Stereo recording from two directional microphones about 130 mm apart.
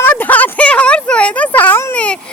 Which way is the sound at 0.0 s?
15° left (ahead or behind).